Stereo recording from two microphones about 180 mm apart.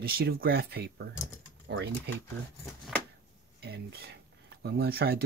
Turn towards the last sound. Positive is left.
turn(degrees=-60)  # may be behind; listen again after turning